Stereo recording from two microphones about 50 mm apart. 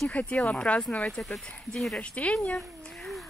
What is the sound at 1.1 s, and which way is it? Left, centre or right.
Speech, centre.